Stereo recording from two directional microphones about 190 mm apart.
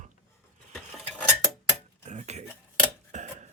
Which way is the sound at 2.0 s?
35° right (ahead or behind).